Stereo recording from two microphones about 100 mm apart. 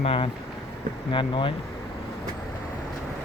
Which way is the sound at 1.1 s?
55° left (ahead or behind).